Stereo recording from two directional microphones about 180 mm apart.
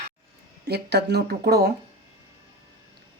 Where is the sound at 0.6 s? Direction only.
65° right (ahead or behind).